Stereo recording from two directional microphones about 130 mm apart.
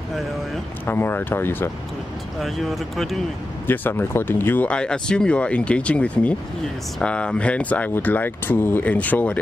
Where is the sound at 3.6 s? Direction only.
15° left (ahead or behind).